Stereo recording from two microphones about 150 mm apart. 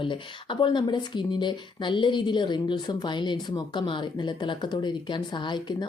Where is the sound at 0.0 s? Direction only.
35° left (ahead or behind).